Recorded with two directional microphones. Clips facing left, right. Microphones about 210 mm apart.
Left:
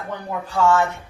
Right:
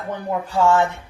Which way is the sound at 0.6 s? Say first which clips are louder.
Right 1 dB; 20° right (ahead or behind).